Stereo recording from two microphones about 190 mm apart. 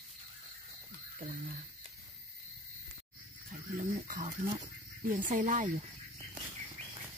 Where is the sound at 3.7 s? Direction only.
45° right (ahead or behind).